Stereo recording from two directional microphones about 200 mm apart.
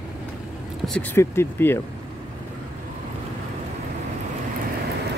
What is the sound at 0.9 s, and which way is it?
Speech, 10° left (ahead or behind).